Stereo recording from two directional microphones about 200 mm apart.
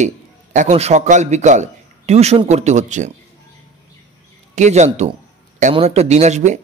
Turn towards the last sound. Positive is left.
turn(degrees=-35)  # may be behind; listen again after turning